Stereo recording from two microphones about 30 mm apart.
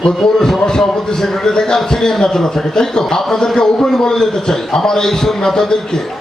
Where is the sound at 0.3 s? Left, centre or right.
Centre.